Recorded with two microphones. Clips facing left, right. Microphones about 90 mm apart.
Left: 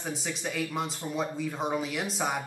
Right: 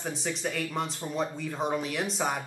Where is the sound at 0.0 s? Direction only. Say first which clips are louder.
Right 2 dB; 5° left (ahead or behind).